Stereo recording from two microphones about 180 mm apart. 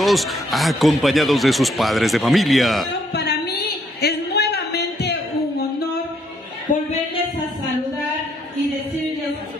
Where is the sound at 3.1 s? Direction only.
65° left (ahead or behind).